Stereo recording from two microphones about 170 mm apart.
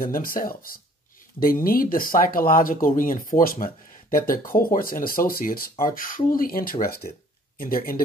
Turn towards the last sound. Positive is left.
turn(degrees=55)  # may be behind; listen again after turning